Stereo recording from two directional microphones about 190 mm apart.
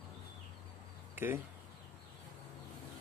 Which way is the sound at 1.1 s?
10° right (ahead or behind).